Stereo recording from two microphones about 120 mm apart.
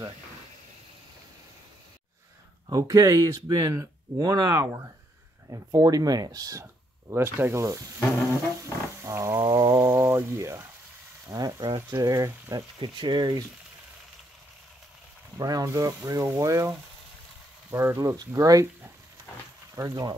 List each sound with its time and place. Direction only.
2.7 s speech: 30° right (ahead or behind)
9.0 s wild animals: 25° right (ahead or behind)
9.5 s a sound: 30° right (ahead or behind)
11.2 s speech: 30° right (ahead or behind)
12.7 s speech: 40° right (ahead or behind)
15.3 s speech: 30° right (ahead or behind)
19.7 s speech: 30° right (ahead or behind)